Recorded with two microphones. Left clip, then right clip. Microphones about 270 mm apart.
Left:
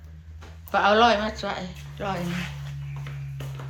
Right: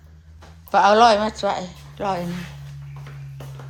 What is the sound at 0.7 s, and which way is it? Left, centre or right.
A woman's voice, centre.